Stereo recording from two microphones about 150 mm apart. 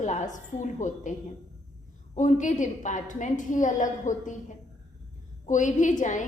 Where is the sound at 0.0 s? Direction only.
50° left (ahead or behind).